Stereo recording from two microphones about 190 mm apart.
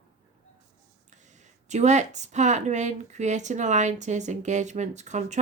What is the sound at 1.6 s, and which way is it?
Speech, 40° right (ahead or behind).